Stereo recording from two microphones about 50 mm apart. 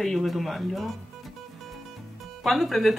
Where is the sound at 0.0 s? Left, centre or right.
Centre.